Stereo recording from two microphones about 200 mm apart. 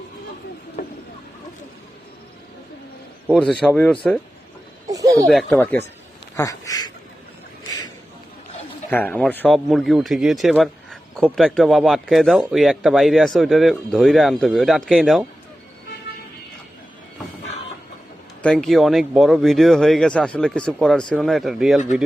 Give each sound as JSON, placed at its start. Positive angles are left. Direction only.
{"t": 3.3, "sound": "speech", "side_deg": 5}
{"t": 4.9, "sound": "a sound", "side_deg": -15}
{"t": 5.3, "sound": "speech", "side_deg": 0}
{"t": 6.3, "sound": "speech", "side_deg": 15}
{"t": 8.9, "sound": "speech", "side_deg": 10}
{"t": 18.4, "sound": "speech", "side_deg": 5}